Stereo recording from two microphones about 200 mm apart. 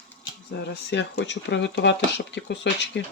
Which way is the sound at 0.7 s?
55° left (ahead or behind).